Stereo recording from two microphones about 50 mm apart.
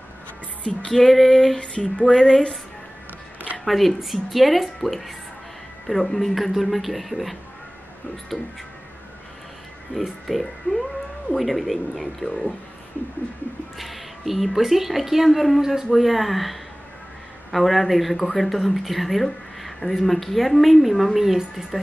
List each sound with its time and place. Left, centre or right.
0.9 s speech: centre
1.6 s a sound: left
3.6 s speech: centre
9.9 s speech: centre
13.7 s speech: centre